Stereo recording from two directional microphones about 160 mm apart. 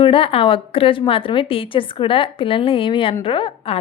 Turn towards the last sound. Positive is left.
turn(degrees=30)  # may be behind; listen again after turning